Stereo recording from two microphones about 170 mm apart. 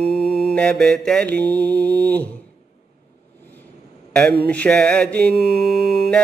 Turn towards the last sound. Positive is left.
turn(degrees=0)  # may be behind; listen again after turning